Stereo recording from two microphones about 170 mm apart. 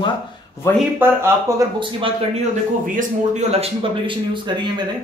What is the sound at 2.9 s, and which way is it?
Speech, 45° right (ahead or behind).